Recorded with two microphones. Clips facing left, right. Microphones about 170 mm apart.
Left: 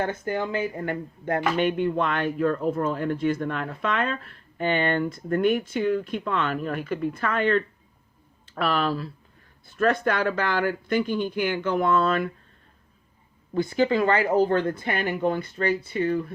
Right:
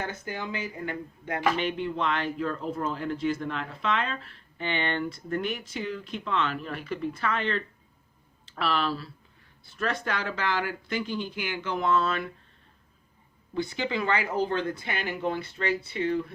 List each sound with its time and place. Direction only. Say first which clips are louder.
0.0 s speech: left 8 dB; 50° left (ahead or behind)
13.5 s speech: left 8 dB; 45° left (ahead or behind)